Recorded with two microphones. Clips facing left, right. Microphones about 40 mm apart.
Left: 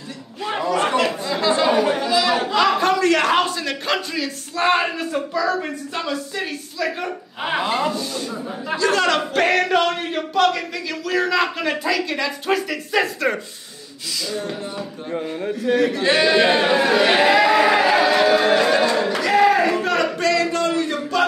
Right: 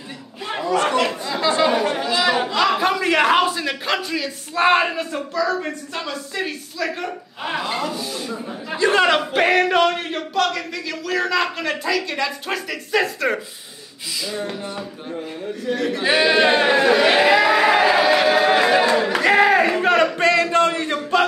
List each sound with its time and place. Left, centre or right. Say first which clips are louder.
0.7 s chatter: right 2 dB; centre
5.3 s a man's voice: right 2 dB; centre
7.4 s speech: left 3 dB; centre
8.7 s a man's voice: right 2 dB; right
9.2 s a man's voice: right 1 dB; centre
14.2 s a sound: even; centre
15.7 s a man's voice: left 4 dB; centre
16.0 s a sound: right 3 dB; centre
19.2 s crowd: right 1 dB; right
20.5 s a sound: right 2 dB; right